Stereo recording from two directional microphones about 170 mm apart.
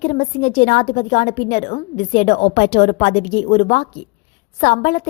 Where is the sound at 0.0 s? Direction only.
45° left (ahead or behind).